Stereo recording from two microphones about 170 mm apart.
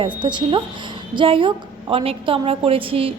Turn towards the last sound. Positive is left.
turn(degrees=-35)  # may be behind; listen again after turning